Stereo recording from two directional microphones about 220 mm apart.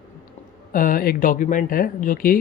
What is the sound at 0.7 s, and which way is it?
Speech, 40° left (ahead or behind).